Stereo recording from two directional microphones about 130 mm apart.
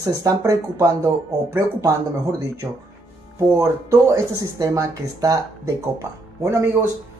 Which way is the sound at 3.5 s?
25° right (ahead or behind).